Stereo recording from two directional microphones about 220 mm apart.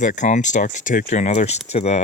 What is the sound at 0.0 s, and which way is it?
Speech, 35° left (ahead or behind).